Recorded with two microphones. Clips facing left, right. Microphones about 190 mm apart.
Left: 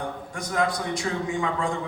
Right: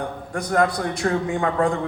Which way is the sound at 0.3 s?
55° right (ahead or behind).